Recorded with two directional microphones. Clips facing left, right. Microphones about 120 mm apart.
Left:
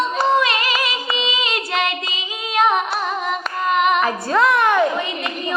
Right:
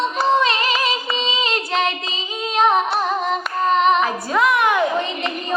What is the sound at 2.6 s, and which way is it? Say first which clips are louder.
Female singing: right 1 dB; 35° right (ahead or behind).